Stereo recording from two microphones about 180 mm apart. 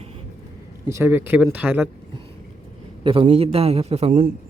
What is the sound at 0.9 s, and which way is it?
Speech, 15° right (ahead or behind).